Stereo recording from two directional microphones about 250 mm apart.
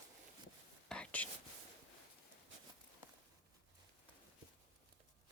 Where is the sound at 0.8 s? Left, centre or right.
Centre.